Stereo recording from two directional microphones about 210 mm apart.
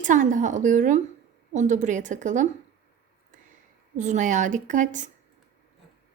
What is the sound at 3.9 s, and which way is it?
A woman's voice, 35° right (ahead or behind).